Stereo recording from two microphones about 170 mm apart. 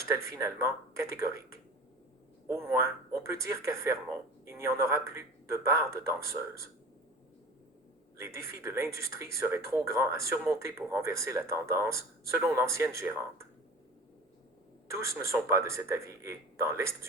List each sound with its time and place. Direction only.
0.1 s speech: 15° right (ahead or behind)
2.5 s speech: 15° right (ahead or behind)
8.2 s speech: 15° right (ahead or behind)
14.8 s speech: 15° right (ahead or behind)